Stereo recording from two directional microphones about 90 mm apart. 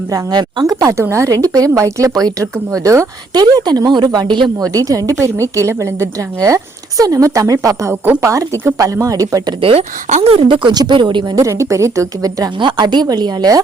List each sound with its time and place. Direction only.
0.1 s a woman's voice: 50° right (ahead or behind)
3.3 s speech: 50° right (ahead or behind)
4.7 s a woman's voice: 40° right (ahead or behind)
9.6 s speech: 90° right
10.2 s speech: 70° right (ahead or behind)
10.8 s speech: 55° right (ahead or behind)
11.3 s a woman's voice: 35° right (ahead or behind)
12.5 s speech: 60° right (ahead or behind)